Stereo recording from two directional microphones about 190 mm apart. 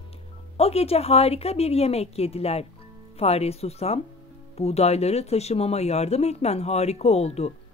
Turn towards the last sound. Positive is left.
turn(degrees=35)  # may be behind; listen again after turning